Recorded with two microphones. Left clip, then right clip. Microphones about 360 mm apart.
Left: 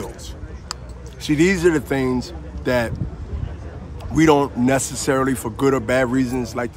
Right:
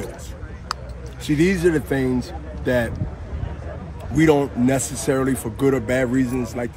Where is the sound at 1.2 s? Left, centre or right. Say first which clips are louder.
Left 2 dB; centre.